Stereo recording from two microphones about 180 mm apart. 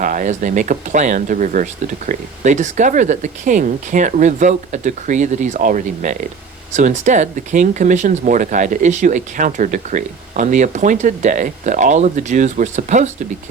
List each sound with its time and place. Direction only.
0.0 s speech: 45° right (ahead or behind)